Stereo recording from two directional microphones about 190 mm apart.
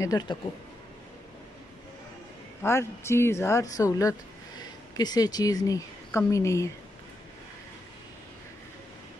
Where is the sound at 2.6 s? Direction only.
15° left (ahead or behind).